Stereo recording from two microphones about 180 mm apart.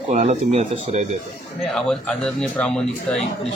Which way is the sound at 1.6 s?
Centre (ahead or behind).